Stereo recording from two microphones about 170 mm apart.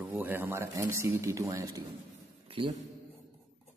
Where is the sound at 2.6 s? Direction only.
30° right (ahead or behind).